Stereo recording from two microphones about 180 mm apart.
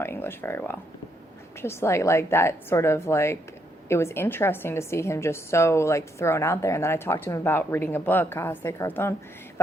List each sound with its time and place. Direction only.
0.0 s a woman's voice: 10° left (ahead or behind)